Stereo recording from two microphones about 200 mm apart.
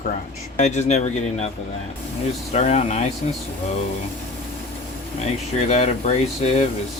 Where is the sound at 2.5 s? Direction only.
35° left (ahead or behind).